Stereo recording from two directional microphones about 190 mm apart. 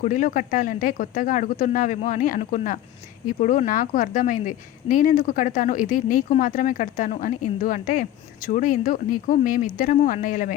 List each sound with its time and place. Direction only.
0.0 s speech: 45° left (ahead or behind)